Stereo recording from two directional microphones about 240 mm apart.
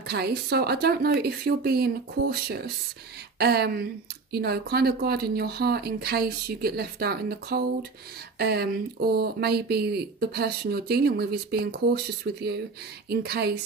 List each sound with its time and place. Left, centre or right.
0.1 s speech: right